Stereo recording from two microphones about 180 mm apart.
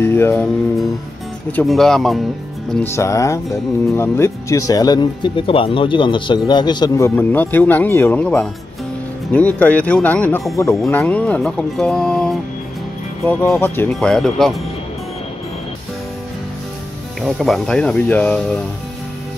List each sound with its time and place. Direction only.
0.0 s speech: 15° left (ahead or behind)
1.5 s speech: 5° left (ahead or behind)
2.7 s speech: 10° left (ahead or behind)
7.2 s speech: 10° left (ahead or behind)
17.2 s speech: centre (ahead or behind)